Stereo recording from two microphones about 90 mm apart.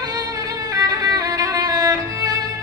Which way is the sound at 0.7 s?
45° right (ahead or behind).